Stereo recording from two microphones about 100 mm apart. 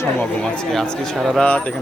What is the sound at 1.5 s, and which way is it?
Speech, 15° left (ahead or behind).